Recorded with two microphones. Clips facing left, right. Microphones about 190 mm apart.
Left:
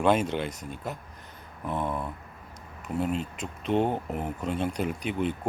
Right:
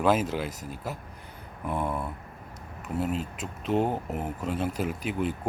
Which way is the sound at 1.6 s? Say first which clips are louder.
Even; 10° right (ahead or behind).